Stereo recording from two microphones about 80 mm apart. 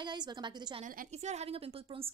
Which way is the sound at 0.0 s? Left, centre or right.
Right.